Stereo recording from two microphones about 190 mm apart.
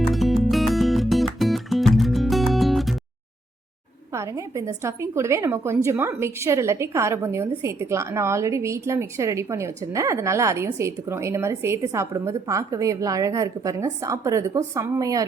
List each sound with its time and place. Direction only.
0.1 s music: centre (ahead or behind)
4.1 s a woman's voice: 15° right (ahead or behind)